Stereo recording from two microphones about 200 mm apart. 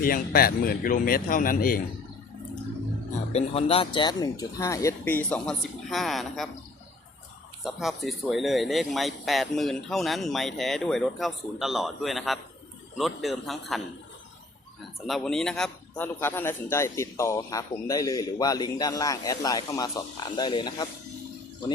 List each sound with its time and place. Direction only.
0.0 s speech: 45° left (ahead or behind)
3.3 s a man's voice: 30° left (ahead or behind); by 6.5 s centre (ahead or behind)
7.6 s speech: centre (ahead or behind)
15.0 s a man's voice: centre (ahead or behind); by 20.8 s 20° left (ahead or behind)